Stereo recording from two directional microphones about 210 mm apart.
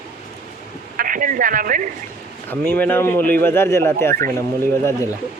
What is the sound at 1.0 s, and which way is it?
Speech, 40° right (ahead or behind).